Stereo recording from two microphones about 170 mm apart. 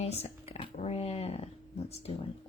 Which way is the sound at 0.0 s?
40° left (ahead or behind).